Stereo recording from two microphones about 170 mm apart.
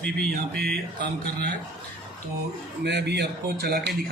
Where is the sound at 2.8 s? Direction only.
85° right; by 3.9 s 70° right (ahead or behind).